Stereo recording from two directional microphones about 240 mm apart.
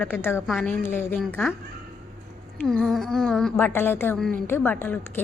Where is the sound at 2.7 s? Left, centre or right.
Centre.